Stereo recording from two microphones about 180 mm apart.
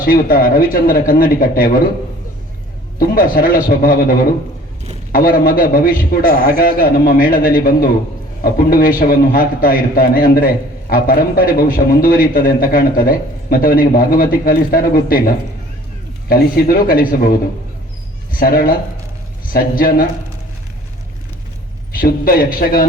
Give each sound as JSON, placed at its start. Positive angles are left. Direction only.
{"t": 0.0, "sound": "a man's voice", "side_deg": 50}
{"t": 3.0, "sound": "a man's voice", "side_deg": 50}
{"t": 16.3, "sound": "a man's voice", "side_deg": 55}
{"t": 21.9, "sound": "a man's voice", "side_deg": 55}